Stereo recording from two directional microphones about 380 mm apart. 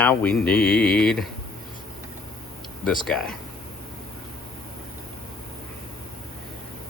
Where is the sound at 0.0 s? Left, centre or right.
Centre.